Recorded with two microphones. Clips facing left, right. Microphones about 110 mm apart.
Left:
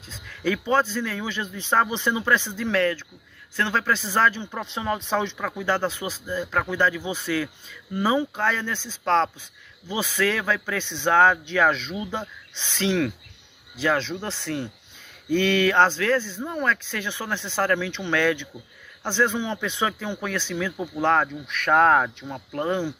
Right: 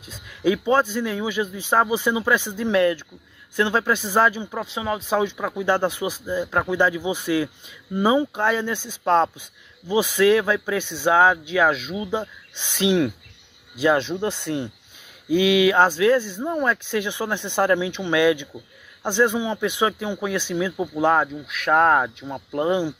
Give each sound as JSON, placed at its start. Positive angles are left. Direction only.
{"t": 0.0, "sound": "speech", "side_deg": -15}